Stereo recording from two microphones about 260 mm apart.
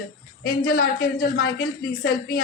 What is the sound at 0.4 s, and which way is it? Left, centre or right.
A woman's voice, left.